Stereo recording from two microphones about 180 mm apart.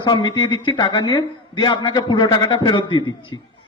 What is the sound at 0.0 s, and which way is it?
Speech, 25° left (ahead or behind).